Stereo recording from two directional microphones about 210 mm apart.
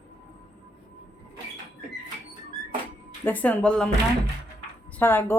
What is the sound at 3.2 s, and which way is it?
Speech, 10° left (ahead or behind).